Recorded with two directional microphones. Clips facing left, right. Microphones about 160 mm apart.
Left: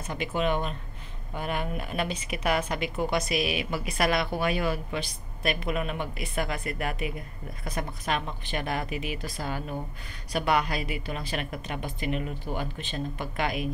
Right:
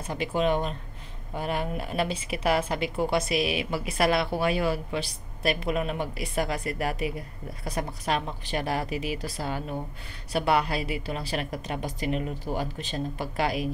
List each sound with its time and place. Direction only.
0.0 s a woman's voice: 35° right (ahead or behind)